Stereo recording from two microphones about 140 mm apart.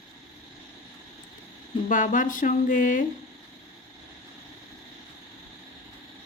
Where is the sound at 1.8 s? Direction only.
65° left (ahead or behind).